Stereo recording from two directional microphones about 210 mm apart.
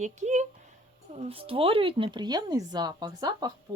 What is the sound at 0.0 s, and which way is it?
Speech, 35° right (ahead or behind).